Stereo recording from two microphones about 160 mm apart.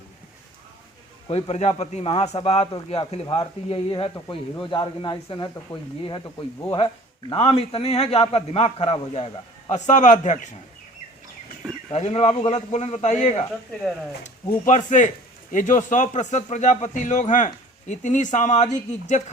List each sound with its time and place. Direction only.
1.3 s a man's voice: 40° left (ahead or behind)
11.9 s a man's voice: 45° left (ahead or behind)
14.7 s a man's voice: 50° left (ahead or behind)